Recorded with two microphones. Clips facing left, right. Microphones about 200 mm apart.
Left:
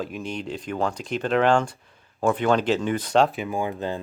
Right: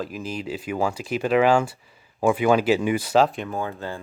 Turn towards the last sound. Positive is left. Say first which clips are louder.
# left 2 dB
turn(degrees=15)  # may be behind; listen again after turning